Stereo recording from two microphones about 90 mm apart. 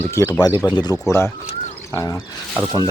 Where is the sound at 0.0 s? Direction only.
30° left (ahead or behind).